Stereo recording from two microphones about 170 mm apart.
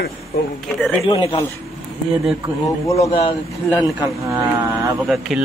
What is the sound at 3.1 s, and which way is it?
Speech, 35° left (ahead or behind).